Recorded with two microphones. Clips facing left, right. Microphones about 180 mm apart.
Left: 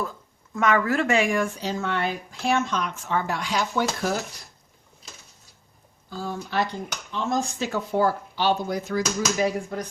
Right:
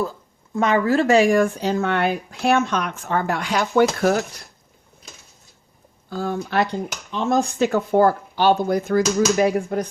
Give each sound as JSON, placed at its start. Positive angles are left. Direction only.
{"t": 0.5, "sound": "speech", "side_deg": -30}
{"t": 1.5, "sound": "speech", "side_deg": -60}
{"t": 6.1, "sound": "speech", "side_deg": -60}